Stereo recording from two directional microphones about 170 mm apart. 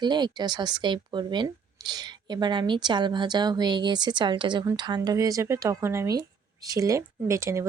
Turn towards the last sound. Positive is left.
turn(degrees=-15)  # may be behind; listen again after turning